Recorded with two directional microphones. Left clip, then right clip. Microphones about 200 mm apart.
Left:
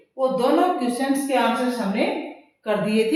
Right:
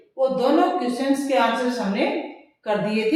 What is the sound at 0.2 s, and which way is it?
A woman's voice, 15° left (ahead or behind).